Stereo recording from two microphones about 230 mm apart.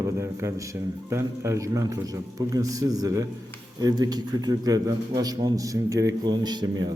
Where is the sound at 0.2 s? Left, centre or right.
Centre.